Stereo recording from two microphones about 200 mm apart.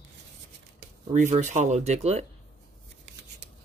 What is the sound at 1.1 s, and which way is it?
Speech, 40° right (ahead or behind).